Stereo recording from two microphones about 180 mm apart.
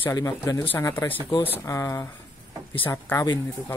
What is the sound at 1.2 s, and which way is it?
Speech, 25° left (ahead or behind).